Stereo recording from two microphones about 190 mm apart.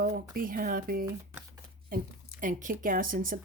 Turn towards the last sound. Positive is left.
turn(degrees=-45)  # may be behind; listen again after turning